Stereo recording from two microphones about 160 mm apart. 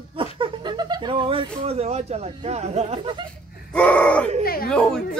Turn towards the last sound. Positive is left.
turn(degrees=5)  # may be behind; listen again after turning